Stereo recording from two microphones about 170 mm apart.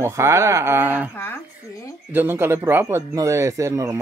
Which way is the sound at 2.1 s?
15° right (ahead or behind).